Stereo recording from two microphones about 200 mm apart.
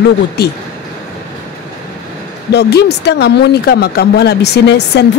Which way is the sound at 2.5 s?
55° left (ahead or behind).